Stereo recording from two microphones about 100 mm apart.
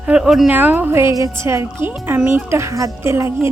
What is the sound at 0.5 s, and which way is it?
A woman's voice, 20° right (ahead or behind).